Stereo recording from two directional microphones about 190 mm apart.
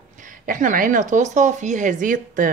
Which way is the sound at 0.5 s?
45° right (ahead or behind).